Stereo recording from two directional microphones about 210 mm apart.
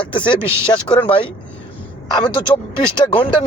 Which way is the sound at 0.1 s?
25° left (ahead or behind).